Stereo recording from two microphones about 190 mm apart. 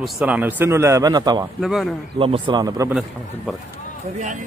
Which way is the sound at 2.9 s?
Centre (ahead or behind).